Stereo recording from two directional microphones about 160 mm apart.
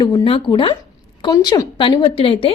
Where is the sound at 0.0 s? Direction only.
30° left (ahead or behind).